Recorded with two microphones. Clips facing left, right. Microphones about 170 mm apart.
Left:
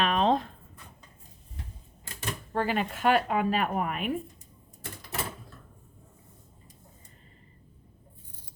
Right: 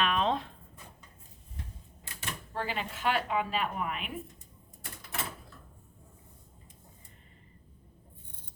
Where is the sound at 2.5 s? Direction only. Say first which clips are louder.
Left 7 dB; 50° left (ahead or behind).